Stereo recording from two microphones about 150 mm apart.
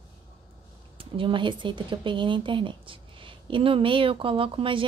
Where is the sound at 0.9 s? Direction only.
35° right (ahead or behind).